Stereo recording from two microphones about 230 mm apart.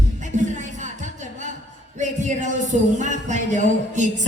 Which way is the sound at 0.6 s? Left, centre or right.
Right.